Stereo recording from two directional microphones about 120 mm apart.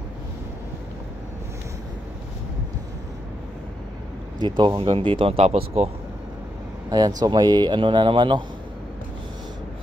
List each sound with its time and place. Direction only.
4.4 s speech: 40° right (ahead or behind); by 5.9 s 60° right (ahead or behind)
6.9 s speech: 30° right (ahead or behind)